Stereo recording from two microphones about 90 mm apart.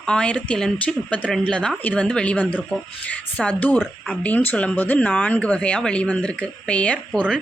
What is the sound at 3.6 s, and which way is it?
Speech, 15° left (ahead or behind).